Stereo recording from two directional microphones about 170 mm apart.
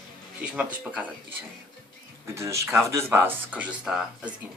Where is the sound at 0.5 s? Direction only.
10° right (ahead or behind).